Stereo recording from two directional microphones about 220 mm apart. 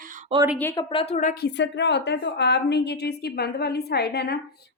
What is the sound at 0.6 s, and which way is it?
Speech, 10° left (ahead or behind).